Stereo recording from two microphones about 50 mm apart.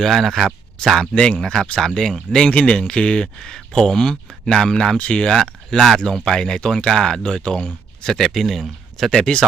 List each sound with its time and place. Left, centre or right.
0.0 s speech: centre
0.9 s speech: centre
5.3 s speech: centre
8.0 s speech: centre